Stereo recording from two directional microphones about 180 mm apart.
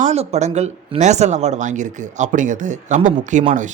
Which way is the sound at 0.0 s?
35° right (ahead or behind).